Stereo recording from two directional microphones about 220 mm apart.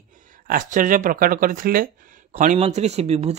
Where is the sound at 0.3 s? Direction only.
35° right (ahead or behind).